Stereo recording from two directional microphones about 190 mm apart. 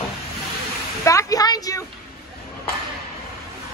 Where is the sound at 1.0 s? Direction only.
20° left (ahead or behind).